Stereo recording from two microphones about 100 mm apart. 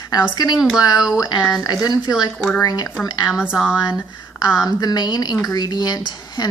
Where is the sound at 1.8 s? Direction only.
45° left (ahead or behind).